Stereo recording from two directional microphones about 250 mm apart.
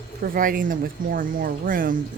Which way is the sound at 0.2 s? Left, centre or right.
Right.